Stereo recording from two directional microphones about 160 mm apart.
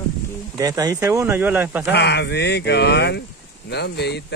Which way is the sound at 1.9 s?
90° left.